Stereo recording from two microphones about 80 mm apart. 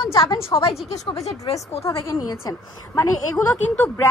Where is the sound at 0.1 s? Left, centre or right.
Left.